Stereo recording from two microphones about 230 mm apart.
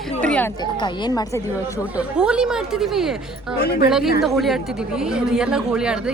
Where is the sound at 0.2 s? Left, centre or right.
Centre.